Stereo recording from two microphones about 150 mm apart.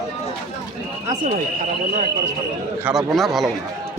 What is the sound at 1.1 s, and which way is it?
Speech, 60° right (ahead or behind).